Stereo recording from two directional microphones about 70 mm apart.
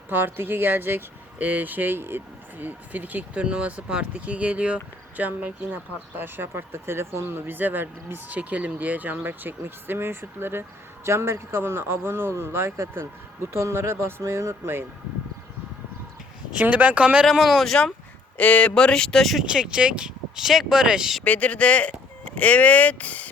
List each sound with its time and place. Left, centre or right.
0.1 s speech: right
16.5 s speech: centre
17.2 s speech: centre
18.3 s speech: centre
19.5 s speech: centre
21.2 s speech: left